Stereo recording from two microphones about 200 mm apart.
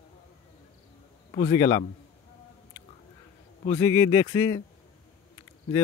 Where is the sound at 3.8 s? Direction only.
15° left (ahead or behind).